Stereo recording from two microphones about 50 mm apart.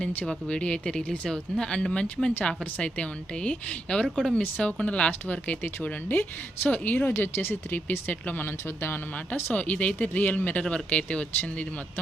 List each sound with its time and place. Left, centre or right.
0.0 s speech: left
0.3 s speech: centre
4.1 s speech: centre
4.4 s speech: left
7.2 s speech: left
7.7 s speech: left
9.5 s speech: left